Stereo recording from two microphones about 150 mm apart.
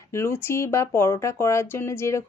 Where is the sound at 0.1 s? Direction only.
15° left (ahead or behind).